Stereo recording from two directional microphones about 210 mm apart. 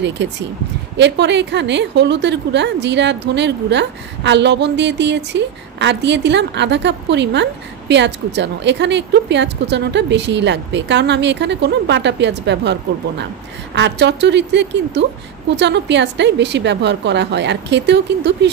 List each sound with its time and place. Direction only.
0.2 s a woman's voice: 55° right (ahead or behind)
13.7 s a woman's voice: 55° right (ahead or behind)